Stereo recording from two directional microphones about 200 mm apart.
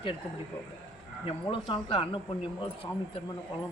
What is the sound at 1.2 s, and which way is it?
Speech, 25° left (ahead or behind).